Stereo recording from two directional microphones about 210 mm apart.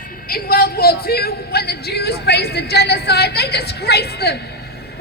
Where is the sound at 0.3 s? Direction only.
45° left (ahead or behind).